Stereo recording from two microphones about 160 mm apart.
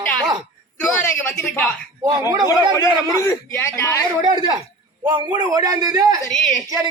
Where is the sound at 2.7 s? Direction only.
20° left (ahead or behind).